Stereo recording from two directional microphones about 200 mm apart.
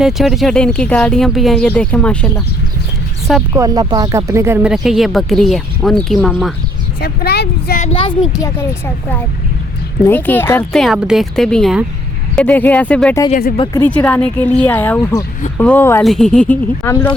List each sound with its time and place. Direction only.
0.0 s speech: centre (ahead or behind)
3.5 s speech: 15° right (ahead or behind); by 6.5 s centre (ahead or behind)
7.0 s speech: 50° left (ahead or behind)
7.8 s speech: 30° left (ahead or behind)
8.3 s speech: 15° left (ahead or behind)
10.0 s speech: 10° left (ahead or behind)